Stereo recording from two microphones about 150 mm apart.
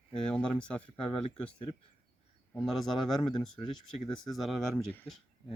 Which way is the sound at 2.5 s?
Centre (ahead or behind).